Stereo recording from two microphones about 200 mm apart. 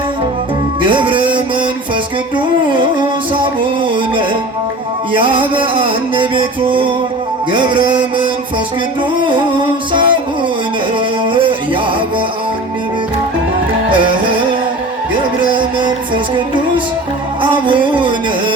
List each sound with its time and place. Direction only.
0.8 s music: 25° right (ahead or behind)
2.6 s music: 25° right (ahead or behind)
5.1 s music: 25° right (ahead or behind)
9.1 s music: 25° right (ahead or behind)
11.3 s music: 25° right (ahead or behind)
15.4 s music: 25° right (ahead or behind)
17.7 s a sound: 25° right (ahead or behind)